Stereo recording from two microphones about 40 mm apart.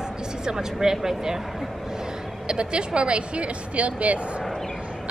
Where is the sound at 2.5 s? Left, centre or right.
Right.